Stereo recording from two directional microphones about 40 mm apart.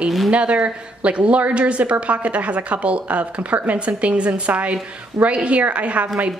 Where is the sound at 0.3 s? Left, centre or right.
Right.